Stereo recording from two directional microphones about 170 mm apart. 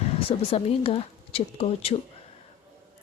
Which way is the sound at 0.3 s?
35° left (ahead or behind).